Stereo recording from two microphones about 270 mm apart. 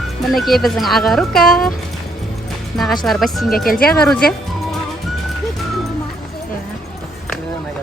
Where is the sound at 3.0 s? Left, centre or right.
Centre.